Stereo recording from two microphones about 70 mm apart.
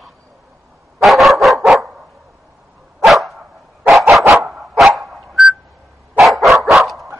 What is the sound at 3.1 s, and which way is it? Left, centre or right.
Dog, centre.